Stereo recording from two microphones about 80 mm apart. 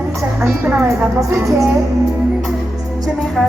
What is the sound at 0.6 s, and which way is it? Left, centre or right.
Speech, right.